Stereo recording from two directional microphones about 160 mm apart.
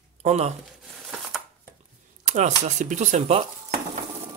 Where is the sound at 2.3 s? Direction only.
45° right (ahead or behind).